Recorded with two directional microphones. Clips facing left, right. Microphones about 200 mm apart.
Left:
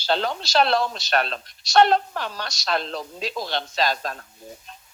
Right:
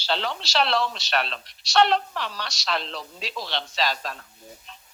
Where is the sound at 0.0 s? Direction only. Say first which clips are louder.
Left 4 dB; 45° left (ahead or behind).